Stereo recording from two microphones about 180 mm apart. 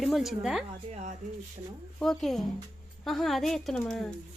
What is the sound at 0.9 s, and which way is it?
Speech, 40° right (ahead or behind).